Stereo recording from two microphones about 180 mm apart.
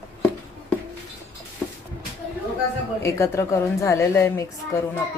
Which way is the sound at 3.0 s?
15° left (ahead or behind).